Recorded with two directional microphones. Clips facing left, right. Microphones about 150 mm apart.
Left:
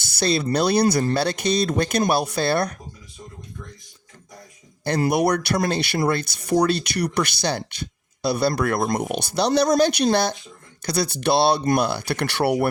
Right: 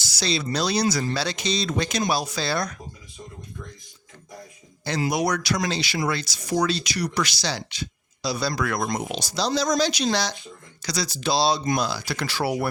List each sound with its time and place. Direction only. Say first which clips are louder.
0.0 s a sound: left 5 dB; 55° left (ahead or behind)
0.5 s speech: left 5 dB; 55° left (ahead or behind)
4.8 s speech: left 4 dB; 55° left (ahead or behind)